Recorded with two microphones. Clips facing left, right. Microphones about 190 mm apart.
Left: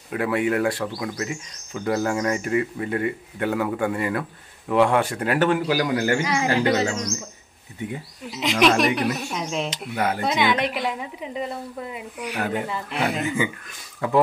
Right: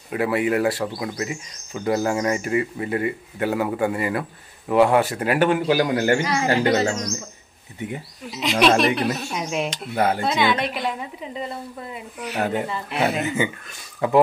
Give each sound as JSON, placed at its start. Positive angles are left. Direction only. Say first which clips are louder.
{"t": 0.1, "sound": "speech", "louder": "right 1 dB", "side_deg": -10}
{"t": 5.6, "sound": "a man's voice", "louder": "right 2 dB", "side_deg": -25}
{"t": 6.4, "sound": "music", "louder": "right 1 dB", "side_deg": -40}
{"t": 8.4, "sound": "a woman's voice", "louder": "right 1 dB", "side_deg": 20}
{"t": 9.3, "sound": "speech", "louder": "right 2 dB", "side_deg": -10}
{"t": 9.9, "sound": "a man's voice", "louder": "right 4 dB", "side_deg": -30}
{"t": 10.2, "sound": "a woman's voice", "louder": "even", "side_deg": 15}
{"t": 13.2, "sound": "a man's voice", "louder": "right 1 dB", "side_deg": -25}